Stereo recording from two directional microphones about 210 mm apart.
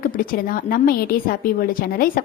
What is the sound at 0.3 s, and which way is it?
A woman's voice, 45° left (ahead or behind).